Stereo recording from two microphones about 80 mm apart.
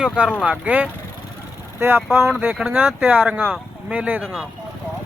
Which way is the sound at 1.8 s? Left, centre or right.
Right.